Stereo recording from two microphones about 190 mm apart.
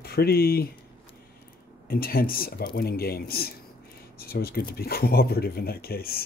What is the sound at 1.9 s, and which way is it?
Speech, 50° left (ahead or behind).